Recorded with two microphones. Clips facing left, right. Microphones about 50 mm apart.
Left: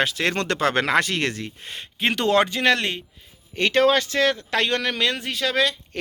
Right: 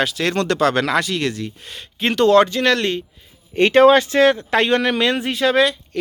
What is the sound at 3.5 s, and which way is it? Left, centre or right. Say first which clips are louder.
Speech: right 7 dB; right.